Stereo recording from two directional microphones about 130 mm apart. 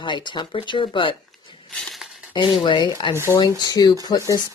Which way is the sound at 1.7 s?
5° left (ahead or behind).